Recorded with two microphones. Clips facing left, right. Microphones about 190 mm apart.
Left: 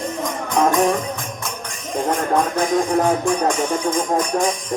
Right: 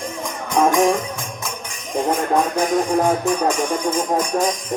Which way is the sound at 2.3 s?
10° right (ahead or behind).